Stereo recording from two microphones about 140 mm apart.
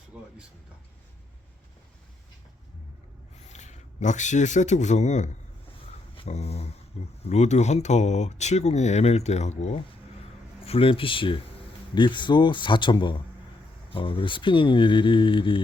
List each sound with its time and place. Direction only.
3.4 s a man's voice: 55° left (ahead or behind)
10.7 s speech: 40° left (ahead or behind)